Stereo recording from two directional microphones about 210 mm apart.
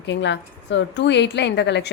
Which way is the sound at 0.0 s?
60° left (ahead or behind).